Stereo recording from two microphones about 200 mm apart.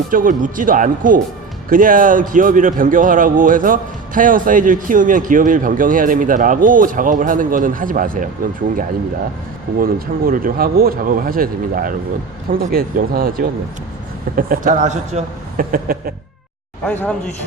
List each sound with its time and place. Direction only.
0.1 s a man's voice: 40° right (ahead or behind)
9.7 s a man's voice: 45° right (ahead or behind)
16.8 s speech: 5° left (ahead or behind)